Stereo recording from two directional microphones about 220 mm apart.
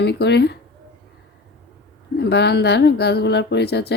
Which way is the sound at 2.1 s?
50° left (ahead or behind).